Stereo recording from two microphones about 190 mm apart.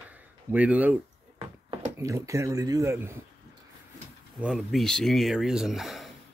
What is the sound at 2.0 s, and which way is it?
Speech, 15° right (ahead or behind).